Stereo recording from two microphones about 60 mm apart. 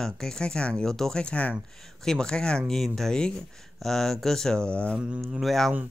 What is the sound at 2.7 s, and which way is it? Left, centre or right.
Speech, centre.